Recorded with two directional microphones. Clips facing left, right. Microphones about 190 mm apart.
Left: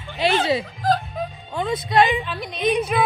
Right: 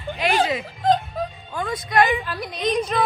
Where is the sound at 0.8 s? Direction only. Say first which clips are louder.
Right 2 dB; 25° right (ahead or behind).